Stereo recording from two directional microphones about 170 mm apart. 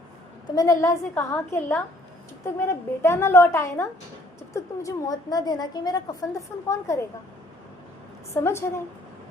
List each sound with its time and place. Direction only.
0.5 s a woman's voice: 20° left (ahead or behind)
8.3 s a woman's voice: 15° left (ahead or behind)